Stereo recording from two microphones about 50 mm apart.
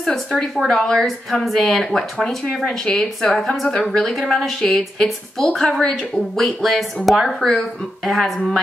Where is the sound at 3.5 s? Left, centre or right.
Centre.